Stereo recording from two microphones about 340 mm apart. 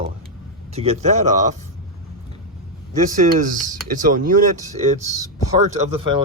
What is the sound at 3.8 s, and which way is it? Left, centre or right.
Speech, right.